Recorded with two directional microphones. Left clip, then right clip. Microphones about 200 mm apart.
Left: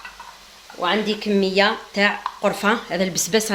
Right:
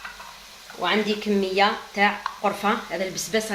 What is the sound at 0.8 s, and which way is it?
Speech, 40° left (ahead or behind).